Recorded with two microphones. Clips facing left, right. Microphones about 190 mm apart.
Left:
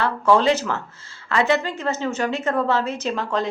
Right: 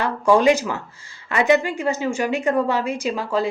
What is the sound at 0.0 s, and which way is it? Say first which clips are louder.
Speech: right 2 dB; 15° right (ahead or behind).